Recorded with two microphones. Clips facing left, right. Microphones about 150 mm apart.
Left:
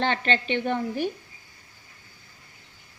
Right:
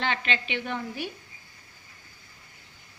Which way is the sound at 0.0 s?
50° left (ahead or behind).